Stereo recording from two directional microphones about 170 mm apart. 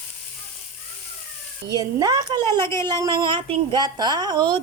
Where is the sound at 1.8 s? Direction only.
20° right (ahead or behind).